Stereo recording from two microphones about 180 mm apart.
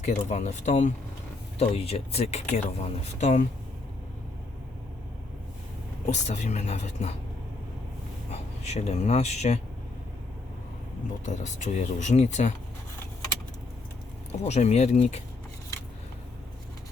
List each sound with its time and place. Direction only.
0.0 s speech: 40° left (ahead or behind)
6.1 s speech: 40° left (ahead or behind)
8.3 s speech: 35° left (ahead or behind)
11.3 s speech: 40° left (ahead or behind)
14.3 s speech: 40° left (ahead or behind)